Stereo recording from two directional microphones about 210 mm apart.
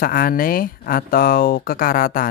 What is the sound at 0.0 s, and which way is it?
Speech, 45° left (ahead or behind).